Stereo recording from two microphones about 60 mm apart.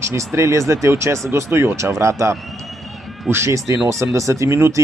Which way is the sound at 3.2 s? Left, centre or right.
Right.